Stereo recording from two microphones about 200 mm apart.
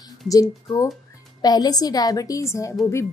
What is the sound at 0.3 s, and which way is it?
A woman's voice, 15° left (ahead or behind).